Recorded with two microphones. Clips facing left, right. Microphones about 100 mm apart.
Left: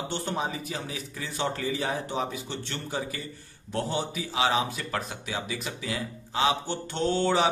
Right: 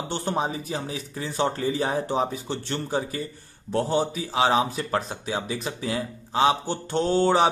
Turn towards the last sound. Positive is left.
turn(degrees=-35)  # may be behind; listen again after turning